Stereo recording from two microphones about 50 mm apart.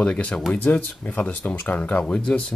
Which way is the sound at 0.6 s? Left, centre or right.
Left.